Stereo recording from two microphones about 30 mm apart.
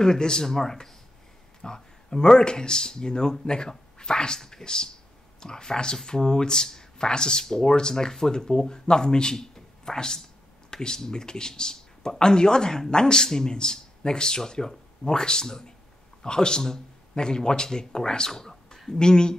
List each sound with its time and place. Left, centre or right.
0.0 s speech: left
1.6 s speech: left
10.7 s computer keyboard: left
11.0 s speech: left
18.3 s speech: centre
18.9 s speech: left